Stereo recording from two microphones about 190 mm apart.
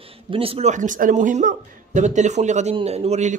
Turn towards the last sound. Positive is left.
turn(degrees=-35)  # may be behind; listen again after turning